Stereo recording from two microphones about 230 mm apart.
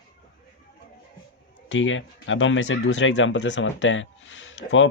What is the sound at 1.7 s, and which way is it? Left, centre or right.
Speech, left.